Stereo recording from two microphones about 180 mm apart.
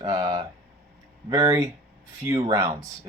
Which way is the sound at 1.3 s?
20° right (ahead or behind).